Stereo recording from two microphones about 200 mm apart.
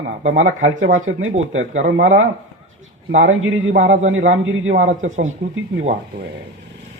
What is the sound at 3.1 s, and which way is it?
A man's voice, 80° right.